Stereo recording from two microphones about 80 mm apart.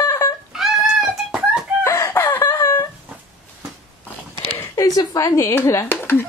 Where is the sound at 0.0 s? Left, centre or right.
Left.